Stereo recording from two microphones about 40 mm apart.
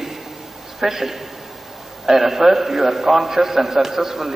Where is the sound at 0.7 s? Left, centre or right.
Centre.